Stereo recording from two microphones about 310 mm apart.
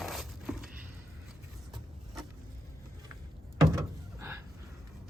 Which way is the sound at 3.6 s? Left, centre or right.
Centre.